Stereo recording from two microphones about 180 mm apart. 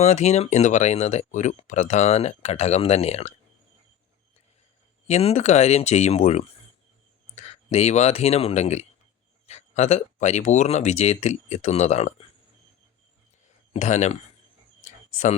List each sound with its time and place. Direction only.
0.0 s speech: 40° left (ahead or behind)
5.0 s speech: 35° left (ahead or behind)
13.7 s speech: 40° left (ahead or behind)
14.8 s a sound: 40° left (ahead or behind)